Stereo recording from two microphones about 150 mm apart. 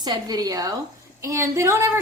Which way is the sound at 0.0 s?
25° right (ahead or behind).